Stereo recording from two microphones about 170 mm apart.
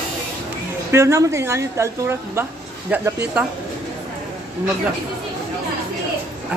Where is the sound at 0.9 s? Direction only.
15° right (ahead or behind).